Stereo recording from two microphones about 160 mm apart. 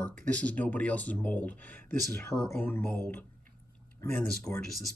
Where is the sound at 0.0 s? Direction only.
10° left (ahead or behind).